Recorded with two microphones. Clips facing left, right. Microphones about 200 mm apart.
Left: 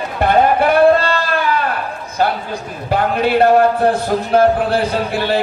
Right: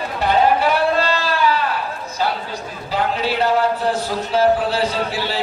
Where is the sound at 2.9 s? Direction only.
55° left (ahead or behind).